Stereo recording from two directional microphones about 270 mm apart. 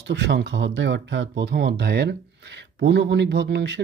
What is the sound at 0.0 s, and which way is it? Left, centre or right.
Speech, right.